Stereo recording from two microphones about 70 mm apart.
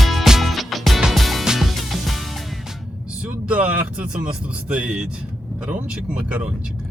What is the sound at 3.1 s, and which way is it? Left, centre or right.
Vehicle, centre.